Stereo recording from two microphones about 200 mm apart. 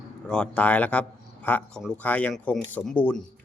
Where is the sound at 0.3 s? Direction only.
5° left (ahead or behind).